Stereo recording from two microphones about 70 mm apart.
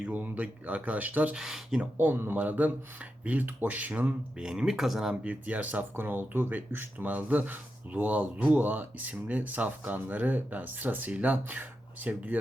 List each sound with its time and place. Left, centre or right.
0.1 s speech: right
1.4 s speech: centre
2.0 s speech: right
4.4 s speech: centre
5.2 s speech: right